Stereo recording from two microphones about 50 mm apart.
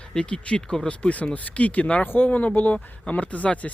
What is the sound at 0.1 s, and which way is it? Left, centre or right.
Speech, centre.